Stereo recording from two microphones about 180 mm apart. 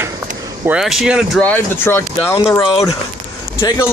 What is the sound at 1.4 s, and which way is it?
Speech, 10° left (ahead or behind).